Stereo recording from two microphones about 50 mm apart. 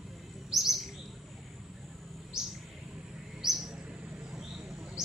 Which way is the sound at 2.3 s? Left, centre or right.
Centre.